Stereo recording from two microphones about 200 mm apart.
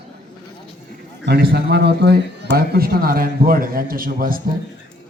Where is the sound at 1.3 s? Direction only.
55° right (ahead or behind).